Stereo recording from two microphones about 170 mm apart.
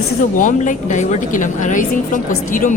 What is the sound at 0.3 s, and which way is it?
A woman's voice, 50° left (ahead or behind).